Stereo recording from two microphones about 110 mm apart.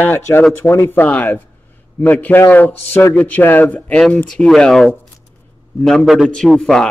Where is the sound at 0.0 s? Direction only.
20° left (ahead or behind).